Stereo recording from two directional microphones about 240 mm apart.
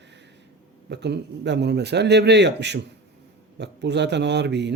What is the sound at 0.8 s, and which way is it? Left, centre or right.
Speech, right.